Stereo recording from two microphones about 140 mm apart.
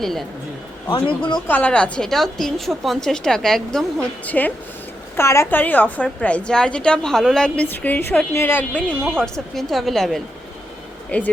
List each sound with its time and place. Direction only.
0.0 s a woman's voice: centre (ahead or behind)
0.9 s a man's voice: 35° left (ahead or behind)
1.5 s a woman's voice: 10° left (ahead or behind)